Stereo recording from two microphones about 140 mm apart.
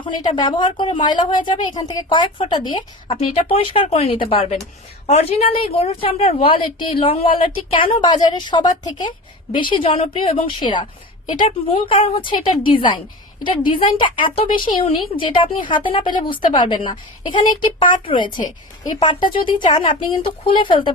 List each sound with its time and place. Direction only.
0.0 s a woman's voice: 35° left (ahead or behind)
18.3 s a woman's voice: 70° left (ahead or behind)
18.9 s a woman's voice: 35° left (ahead or behind)